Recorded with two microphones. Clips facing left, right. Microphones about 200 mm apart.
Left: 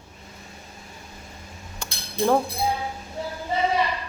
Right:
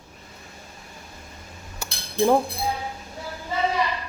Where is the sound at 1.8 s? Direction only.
10° right (ahead or behind).